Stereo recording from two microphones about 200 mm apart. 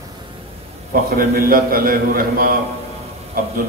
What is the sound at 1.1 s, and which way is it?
A man's voice, 45° right (ahead or behind).